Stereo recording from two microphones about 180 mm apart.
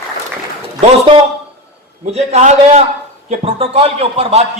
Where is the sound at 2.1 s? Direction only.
40° right (ahead or behind).